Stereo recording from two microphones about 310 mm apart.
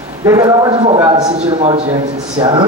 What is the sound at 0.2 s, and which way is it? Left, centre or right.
A man's voice, centre.